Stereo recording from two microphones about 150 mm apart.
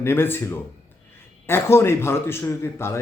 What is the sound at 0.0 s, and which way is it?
Speech, 15° left (ahead or behind).